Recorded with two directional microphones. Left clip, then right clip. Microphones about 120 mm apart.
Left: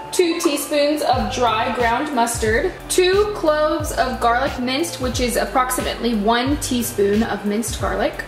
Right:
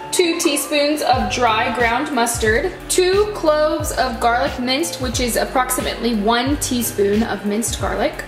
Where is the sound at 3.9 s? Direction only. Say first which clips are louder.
Right 1 dB; 15° right (ahead or behind).